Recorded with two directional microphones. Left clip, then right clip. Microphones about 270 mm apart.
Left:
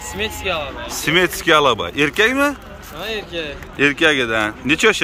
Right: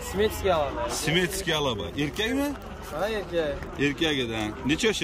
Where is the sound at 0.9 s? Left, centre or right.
Centre.